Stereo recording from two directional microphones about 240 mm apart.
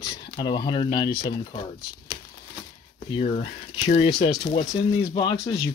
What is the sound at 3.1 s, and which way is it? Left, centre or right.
Speech, left.